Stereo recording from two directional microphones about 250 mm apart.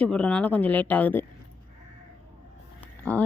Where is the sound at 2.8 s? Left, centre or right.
Centre.